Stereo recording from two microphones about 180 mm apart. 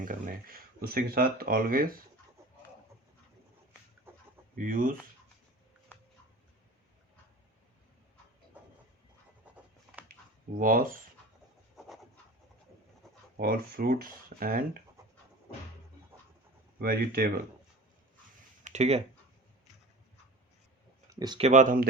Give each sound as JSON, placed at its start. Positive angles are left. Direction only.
{"t": 0.0, "sound": "speech", "side_deg": -50}
{"t": 4.1, "sound": "chicken", "side_deg": -15}
{"t": 4.5, "sound": "speech", "side_deg": -50}
{"t": 10.6, "sound": "speech", "side_deg": -50}
{"t": 13.3, "sound": "speech", "side_deg": -55}
{"t": 16.8, "sound": "speech", "side_deg": -55}
{"t": 18.6, "sound": "speech", "side_deg": -40}
{"t": 21.1, "sound": "a sound", "side_deg": -20}
{"t": 21.3, "sound": "speech", "side_deg": -40}